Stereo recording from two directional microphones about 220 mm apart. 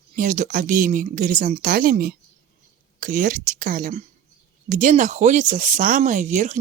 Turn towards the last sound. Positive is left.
turn(degrees=-35)  # may be behind; listen again after turning